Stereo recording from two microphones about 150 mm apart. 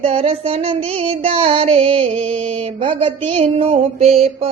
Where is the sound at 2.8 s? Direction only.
35° right (ahead or behind).